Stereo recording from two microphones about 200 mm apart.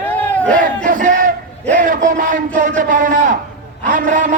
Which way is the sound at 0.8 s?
40° right (ahead or behind).